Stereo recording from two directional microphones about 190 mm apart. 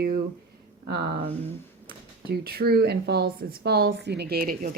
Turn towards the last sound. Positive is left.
turn(degrees=-50)  # may be behind; listen again after turning